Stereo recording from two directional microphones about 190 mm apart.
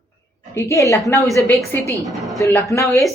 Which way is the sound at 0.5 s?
15° left (ahead or behind).